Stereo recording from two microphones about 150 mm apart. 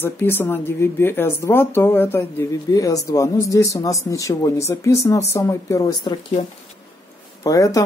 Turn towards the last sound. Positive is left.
turn(degrees=25)  # may be behind; listen again after turning